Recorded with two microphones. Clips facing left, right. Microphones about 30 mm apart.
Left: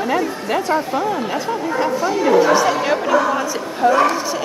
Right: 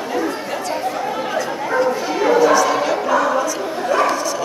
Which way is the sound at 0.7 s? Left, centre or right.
Centre.